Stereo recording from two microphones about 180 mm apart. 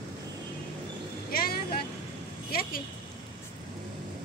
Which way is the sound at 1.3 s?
55° left (ahead or behind).